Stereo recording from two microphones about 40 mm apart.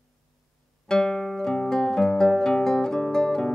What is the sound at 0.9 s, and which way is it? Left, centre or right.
Music, centre.